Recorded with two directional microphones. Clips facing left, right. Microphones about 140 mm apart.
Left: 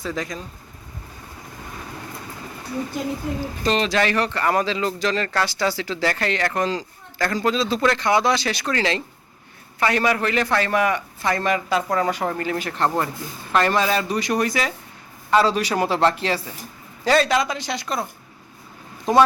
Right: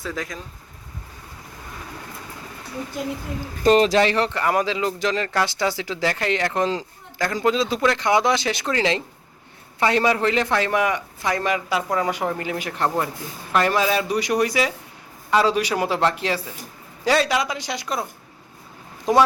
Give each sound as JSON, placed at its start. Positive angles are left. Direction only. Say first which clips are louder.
{"t": 0.0, "sound": "speech", "louder": "left 2 dB", "side_deg": 0}
{"t": 3.6, "sound": "speech", "louder": "right 6 dB", "side_deg": -45}
{"t": 4.0, "sound": "speech", "louder": "right 1 dB", "side_deg": -25}